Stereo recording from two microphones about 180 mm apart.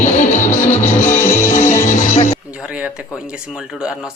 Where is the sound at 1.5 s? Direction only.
45° left (ahead or behind).